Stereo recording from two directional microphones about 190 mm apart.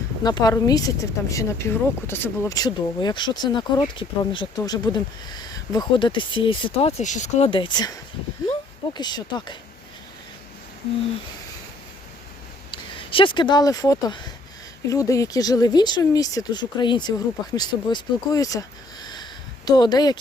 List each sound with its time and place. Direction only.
0.3 s speech: 20° left (ahead or behind)
12.7 s speech: 25° left (ahead or behind)
19.0 s a sound: 20° left (ahead or behind)